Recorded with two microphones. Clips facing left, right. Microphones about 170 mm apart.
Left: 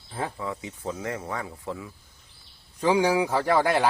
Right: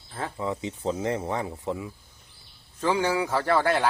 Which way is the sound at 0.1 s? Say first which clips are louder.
Left 2 dB; 10° left (ahead or behind).